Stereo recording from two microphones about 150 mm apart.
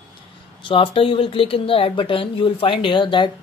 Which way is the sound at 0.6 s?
35° left (ahead or behind).